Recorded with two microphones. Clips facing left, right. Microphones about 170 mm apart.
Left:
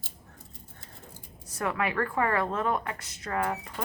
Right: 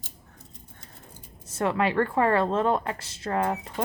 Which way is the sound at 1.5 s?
25° right (ahead or behind).